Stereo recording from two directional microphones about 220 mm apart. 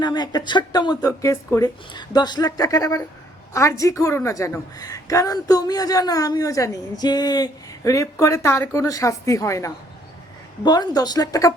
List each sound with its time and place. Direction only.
0.0 s a woman's voice: 20° left (ahead or behind)